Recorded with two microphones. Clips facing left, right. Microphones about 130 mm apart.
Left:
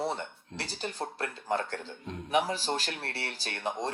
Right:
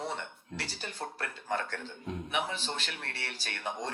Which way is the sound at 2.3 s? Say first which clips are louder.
Left 8 dB; 40° left (ahead or behind).